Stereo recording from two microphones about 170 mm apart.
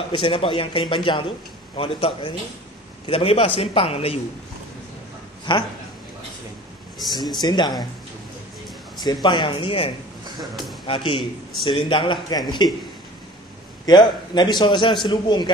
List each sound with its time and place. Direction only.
0.1 s a man's voice: 30° left (ahead or behind)
5.5 s speech: 30° left (ahead or behind)
7.2 s speech: 25° left (ahead or behind)
9.0 s a man's voice: 25° left (ahead or behind)
13.8 s speech: 25° left (ahead or behind)